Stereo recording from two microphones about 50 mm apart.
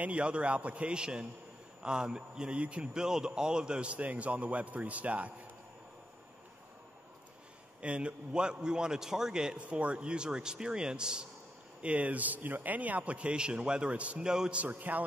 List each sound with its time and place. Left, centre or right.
0.0 s a man's voice: right
2.9 s a man's voice: centre; by 5.3 s right
7.8 s a man's voice: right
11.8 s a man's voice: right
14.2 s a man's voice: centre
14.6 s a man's voice: right